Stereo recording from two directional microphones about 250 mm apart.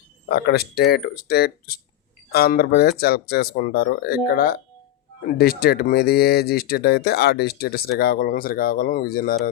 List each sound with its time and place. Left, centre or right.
0.3 s speech: left